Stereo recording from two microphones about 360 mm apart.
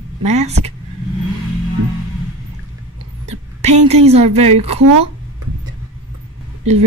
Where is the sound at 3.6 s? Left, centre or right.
Centre.